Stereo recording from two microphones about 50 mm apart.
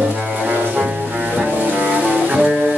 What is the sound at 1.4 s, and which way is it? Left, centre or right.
Music, right.